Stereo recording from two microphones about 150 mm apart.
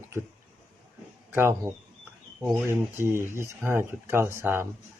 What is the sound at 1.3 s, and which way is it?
Speech, 15° right (ahead or behind).